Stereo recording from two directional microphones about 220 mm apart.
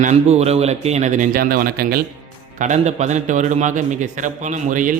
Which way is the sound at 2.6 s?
30° right (ahead or behind).